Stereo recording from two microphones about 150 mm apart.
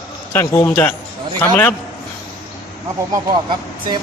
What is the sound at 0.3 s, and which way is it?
A man's voice, 15° left (ahead or behind).